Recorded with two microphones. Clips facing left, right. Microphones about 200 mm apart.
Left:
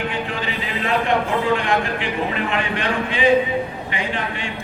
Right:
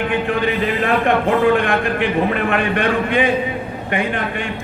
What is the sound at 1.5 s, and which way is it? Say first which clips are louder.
A man's voice: right 4 dB; 55° right (ahead or behind).